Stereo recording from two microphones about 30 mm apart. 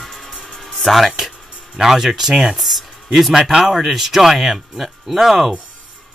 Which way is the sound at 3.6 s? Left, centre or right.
Centre.